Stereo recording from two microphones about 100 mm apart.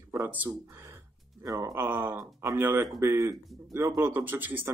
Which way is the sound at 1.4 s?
35° right (ahead or behind).